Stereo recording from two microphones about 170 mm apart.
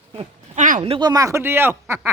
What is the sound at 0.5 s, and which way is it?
Speech, 50° right (ahead or behind).